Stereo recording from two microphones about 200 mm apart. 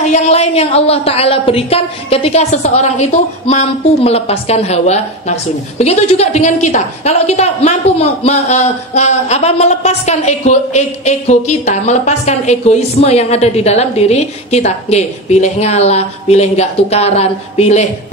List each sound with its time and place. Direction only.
0.0 s a woman's voice: 35° left (ahead or behind)